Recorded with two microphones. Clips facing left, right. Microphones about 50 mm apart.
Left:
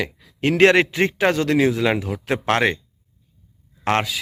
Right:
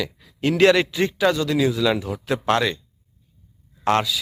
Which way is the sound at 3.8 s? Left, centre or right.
Left.